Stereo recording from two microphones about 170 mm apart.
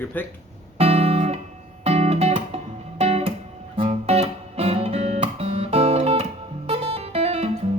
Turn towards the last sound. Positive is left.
turn(degrees=-35)  # may be behind; listen again after turning